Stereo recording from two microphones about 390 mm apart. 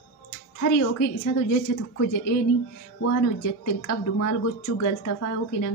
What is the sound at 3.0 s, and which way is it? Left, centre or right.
A woman's voice, left.